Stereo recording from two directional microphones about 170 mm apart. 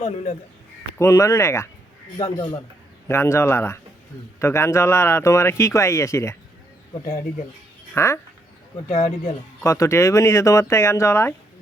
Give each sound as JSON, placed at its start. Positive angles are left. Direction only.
{"t": 0.0, "sound": "speech", "side_deg": 45}
{"t": 0.9, "sound": "speech", "side_deg": 15}
{"t": 3.1, "sound": "speech", "side_deg": 15}
{"t": 7.9, "sound": "speech", "side_deg": 15}
{"t": 8.9, "sound": "speech", "side_deg": 40}
{"t": 9.6, "sound": "speech", "side_deg": 20}